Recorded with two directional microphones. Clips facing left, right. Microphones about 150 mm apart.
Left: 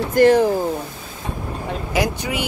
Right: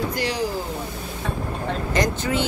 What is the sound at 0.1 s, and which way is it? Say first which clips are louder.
Speech: left 12 dB; 50° left (ahead or behind).